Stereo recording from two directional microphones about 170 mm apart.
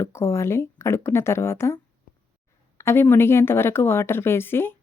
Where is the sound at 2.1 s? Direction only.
55° left (ahead or behind).